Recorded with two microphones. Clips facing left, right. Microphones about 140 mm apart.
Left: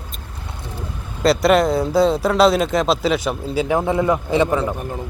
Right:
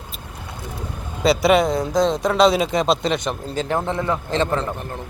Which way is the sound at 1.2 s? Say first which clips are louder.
Left 1 dB; centre (ahead or behind).